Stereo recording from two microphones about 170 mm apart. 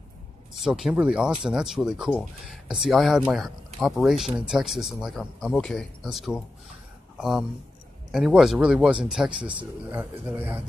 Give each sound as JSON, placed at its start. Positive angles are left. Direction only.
{"t": 0.6, "sound": "a man's voice", "side_deg": 0}